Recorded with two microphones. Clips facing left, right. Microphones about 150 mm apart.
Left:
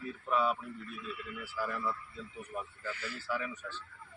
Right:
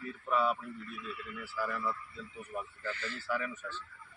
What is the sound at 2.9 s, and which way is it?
Speech, 10° left (ahead or behind).